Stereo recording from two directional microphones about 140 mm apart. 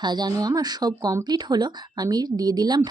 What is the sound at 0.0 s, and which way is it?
Speech, 30° right (ahead or behind).